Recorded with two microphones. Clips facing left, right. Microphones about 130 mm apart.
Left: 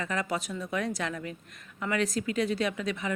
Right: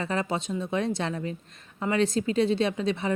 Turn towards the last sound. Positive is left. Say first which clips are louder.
# right 4 dB
turn(degrees=-30)  # may be behind; listen again after turning